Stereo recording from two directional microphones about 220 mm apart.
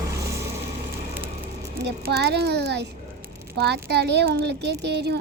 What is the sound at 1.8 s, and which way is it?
Speech, 50° right (ahead or behind).